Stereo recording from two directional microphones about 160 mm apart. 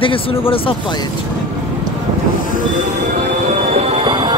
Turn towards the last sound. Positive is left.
turn(degrees=-30)  # may be behind; listen again after turning